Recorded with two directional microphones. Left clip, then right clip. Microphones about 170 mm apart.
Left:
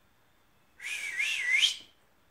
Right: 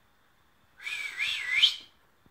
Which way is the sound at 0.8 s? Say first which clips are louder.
Even; centre (ahead or behind).